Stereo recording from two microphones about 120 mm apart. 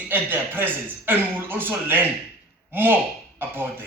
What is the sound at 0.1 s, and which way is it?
A man's voice, 15° right (ahead or behind).